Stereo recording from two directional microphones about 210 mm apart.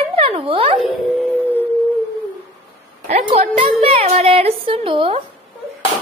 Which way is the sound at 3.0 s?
30° right (ahead or behind).